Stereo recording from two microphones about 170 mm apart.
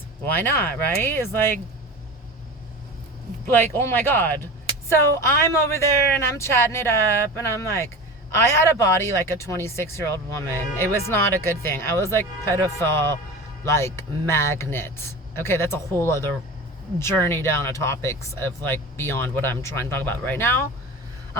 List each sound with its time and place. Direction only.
0.3 s speech: 10° left (ahead or behind)
3.4 s speech: 15° left (ahead or behind)